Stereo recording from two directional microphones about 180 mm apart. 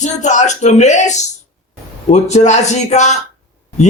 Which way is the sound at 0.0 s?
40° left (ahead or behind).